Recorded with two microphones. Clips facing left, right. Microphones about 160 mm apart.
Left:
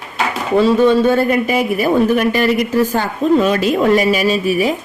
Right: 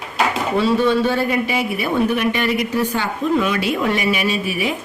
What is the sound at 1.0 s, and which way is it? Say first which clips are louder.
Speech: left 5 dB; 50° left (ahead or behind).